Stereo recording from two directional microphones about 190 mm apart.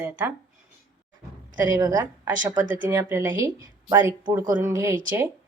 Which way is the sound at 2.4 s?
40° right (ahead or behind).